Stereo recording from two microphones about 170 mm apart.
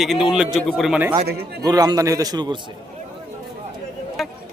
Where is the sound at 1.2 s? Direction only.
70° right (ahead or behind).